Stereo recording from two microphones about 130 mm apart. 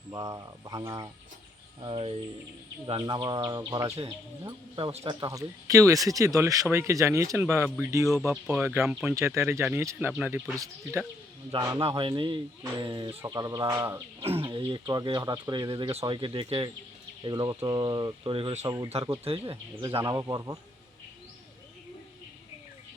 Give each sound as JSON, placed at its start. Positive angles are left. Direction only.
{"t": 0.1, "sound": "speech", "side_deg": -25}
{"t": 1.8, "sound": "speech", "side_deg": -40}
{"t": 8.3, "sound": "speech", "side_deg": -5}
{"t": 9.1, "sound": "speech", "side_deg": -20}
{"t": 10.1, "sound": "speech", "side_deg": -10}
{"t": 10.5, "sound": "speech", "side_deg": -25}
{"t": 11.8, "sound": "speech", "side_deg": -45}
{"t": 14.2, "sound": "speech", "side_deg": -45}
{"t": 18.6, "sound": "speech", "side_deg": -30}
{"t": 19.2, "sound": "speech", "side_deg": -45}
{"t": 20.1, "sound": "speech", "side_deg": -30}